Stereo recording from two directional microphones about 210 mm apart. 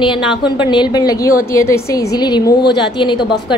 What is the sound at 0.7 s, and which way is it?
A woman's voice, 20° left (ahead or behind).